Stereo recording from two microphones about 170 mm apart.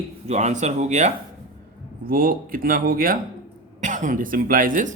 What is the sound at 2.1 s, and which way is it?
Speech, 60° right (ahead or behind).